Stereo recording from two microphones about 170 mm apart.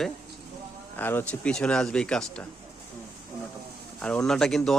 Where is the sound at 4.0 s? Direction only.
5° left (ahead or behind).